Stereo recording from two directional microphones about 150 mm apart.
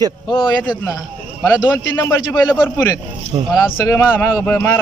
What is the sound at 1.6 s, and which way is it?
Speech, 20° left (ahead or behind).